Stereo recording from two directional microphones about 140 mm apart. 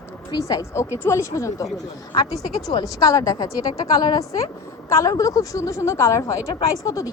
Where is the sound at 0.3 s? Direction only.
25° left (ahead or behind).